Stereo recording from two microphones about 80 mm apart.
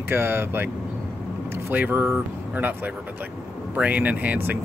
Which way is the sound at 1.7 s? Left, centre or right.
Right.